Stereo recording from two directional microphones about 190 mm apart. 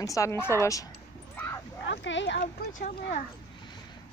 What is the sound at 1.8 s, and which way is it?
Speech, 70° left (ahead or behind).